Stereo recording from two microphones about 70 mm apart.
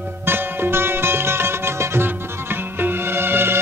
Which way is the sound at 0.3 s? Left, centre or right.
Right.